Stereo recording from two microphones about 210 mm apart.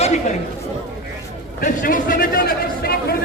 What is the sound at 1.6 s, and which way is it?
A man's voice, 40° left (ahead or behind).